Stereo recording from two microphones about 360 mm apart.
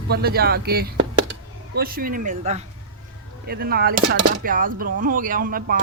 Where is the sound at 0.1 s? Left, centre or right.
Right.